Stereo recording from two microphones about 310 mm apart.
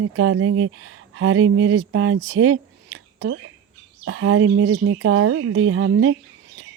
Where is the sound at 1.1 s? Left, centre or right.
Right.